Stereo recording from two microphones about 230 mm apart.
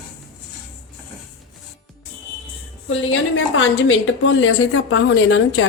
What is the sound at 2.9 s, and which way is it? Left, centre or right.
A woman's voice, left.